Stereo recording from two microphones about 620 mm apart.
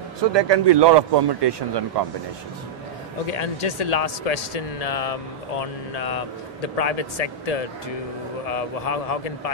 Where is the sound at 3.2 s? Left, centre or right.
Left.